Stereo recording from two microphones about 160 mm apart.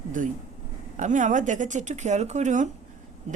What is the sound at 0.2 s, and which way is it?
A woman's voice, 55° right (ahead or behind).